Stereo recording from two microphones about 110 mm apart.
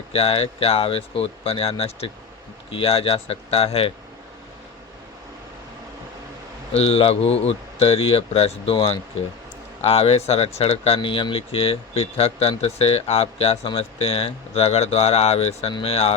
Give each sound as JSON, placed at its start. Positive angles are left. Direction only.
{"t": 0.1, "sound": "speech", "side_deg": 60}
{"t": 6.7, "sound": "speech", "side_deg": 65}
{"t": 9.8, "sound": "speech", "side_deg": 65}